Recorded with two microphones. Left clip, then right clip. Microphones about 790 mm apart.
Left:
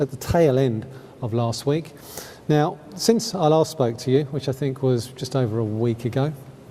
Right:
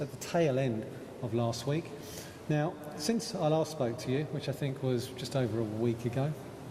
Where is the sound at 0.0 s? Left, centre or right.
Left.